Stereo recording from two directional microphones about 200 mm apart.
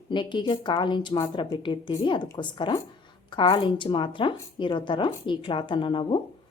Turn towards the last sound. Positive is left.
turn(degrees=25)  # may be behind; listen again after turning